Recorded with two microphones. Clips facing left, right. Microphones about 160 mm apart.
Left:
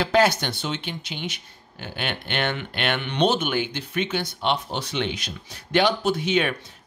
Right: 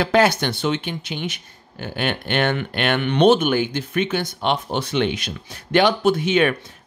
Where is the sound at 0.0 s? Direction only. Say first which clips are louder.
Right 3 dB; 55° right (ahead or behind).